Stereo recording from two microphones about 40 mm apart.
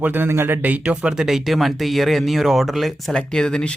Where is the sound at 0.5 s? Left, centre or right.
Right.